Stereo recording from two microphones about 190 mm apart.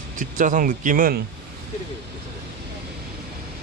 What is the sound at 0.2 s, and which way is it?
Speech, 45° right (ahead or behind).